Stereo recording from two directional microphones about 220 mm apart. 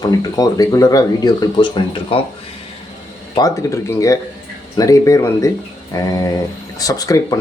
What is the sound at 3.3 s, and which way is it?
Speech, 15° left (ahead or behind).